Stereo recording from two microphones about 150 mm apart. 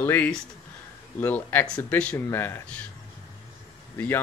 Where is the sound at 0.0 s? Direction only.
10° left (ahead or behind).